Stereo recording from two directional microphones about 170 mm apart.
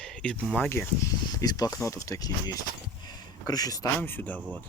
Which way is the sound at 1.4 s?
20° left (ahead or behind).